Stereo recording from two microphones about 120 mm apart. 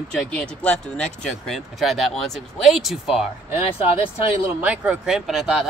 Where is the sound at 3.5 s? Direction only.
15° right (ahead or behind).